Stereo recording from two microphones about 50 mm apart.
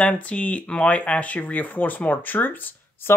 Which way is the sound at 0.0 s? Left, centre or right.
Left.